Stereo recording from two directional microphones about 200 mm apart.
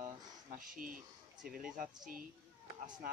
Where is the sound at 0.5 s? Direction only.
45° right (ahead or behind).